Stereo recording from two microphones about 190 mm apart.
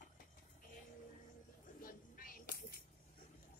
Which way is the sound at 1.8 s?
50° left (ahead or behind).